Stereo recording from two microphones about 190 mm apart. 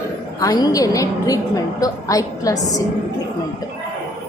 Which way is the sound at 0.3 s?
20° left (ahead or behind).